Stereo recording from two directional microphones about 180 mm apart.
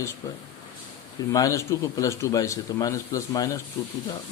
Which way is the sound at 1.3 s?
20° left (ahead or behind).